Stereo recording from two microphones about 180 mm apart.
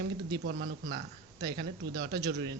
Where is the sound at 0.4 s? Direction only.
70° right (ahead or behind).